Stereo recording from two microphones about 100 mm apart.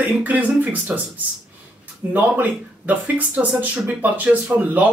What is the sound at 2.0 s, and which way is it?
Speech, 20° right (ahead or behind).